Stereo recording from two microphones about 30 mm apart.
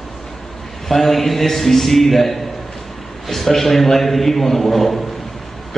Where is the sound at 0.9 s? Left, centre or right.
Centre.